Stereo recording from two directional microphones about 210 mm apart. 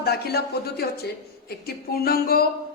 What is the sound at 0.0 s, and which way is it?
A man's voice, 50° left (ahead or behind).